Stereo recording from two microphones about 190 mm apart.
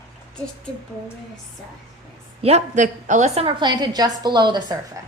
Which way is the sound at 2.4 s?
35° right (ahead or behind).